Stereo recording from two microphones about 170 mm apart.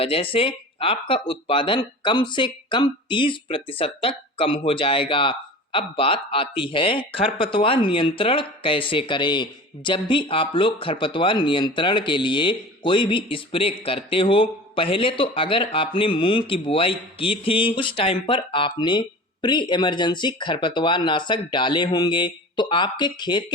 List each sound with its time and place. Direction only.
0.0 s speech: 35° left (ahead or behind)